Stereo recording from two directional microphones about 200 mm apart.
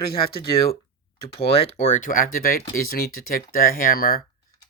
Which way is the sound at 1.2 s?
30° left (ahead or behind).